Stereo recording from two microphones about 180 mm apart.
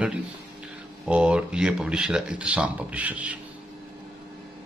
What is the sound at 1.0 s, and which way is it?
Speech, 5° right (ahead or behind).